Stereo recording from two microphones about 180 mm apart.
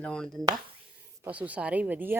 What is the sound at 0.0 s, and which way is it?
Speech, 5° left (ahead or behind).